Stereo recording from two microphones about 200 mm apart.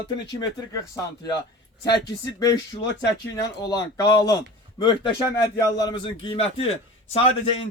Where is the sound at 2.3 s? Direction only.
20° left (ahead or behind).